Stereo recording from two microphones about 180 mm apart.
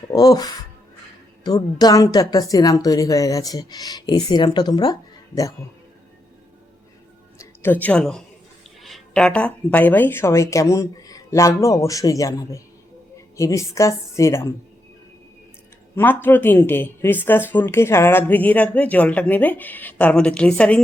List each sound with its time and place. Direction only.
0.1 s speech: 20° left (ahead or behind)
7.3 s a woman's voice: 10° left (ahead or behind)
16.0 s a woman's voice: 10° left (ahead or behind)